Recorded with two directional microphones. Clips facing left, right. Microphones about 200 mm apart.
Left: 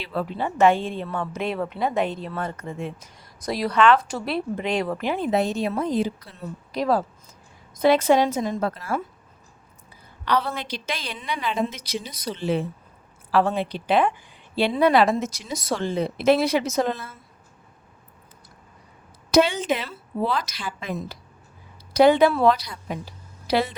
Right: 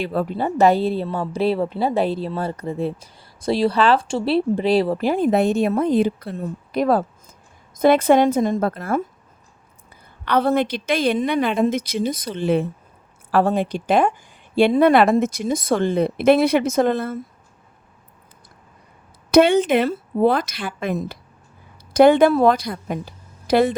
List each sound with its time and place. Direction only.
0.0 s a woman's voice: 45° right (ahead or behind)
10.2 s a woman's voice: 55° right (ahead or behind)
13.3 s a woman's voice: 45° right (ahead or behind)
19.3 s a woman's voice: 60° right (ahead or behind)